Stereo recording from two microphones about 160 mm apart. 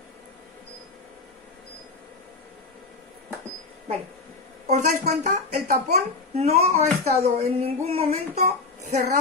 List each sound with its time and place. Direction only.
4.6 s a child's voice: 45° right (ahead or behind)